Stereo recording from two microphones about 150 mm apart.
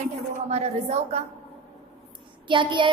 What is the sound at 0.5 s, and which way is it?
Speech, 45° right (ahead or behind).